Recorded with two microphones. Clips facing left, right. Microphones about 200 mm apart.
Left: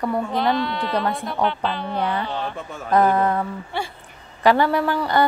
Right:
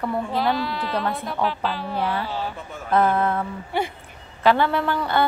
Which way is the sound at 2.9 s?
15° left (ahead or behind).